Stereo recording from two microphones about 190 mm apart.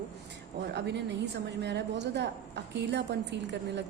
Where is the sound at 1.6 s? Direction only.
65° right (ahead or behind).